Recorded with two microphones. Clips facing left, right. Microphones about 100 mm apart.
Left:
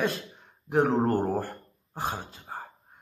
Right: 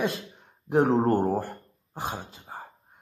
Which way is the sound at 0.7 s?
30° right (ahead or behind).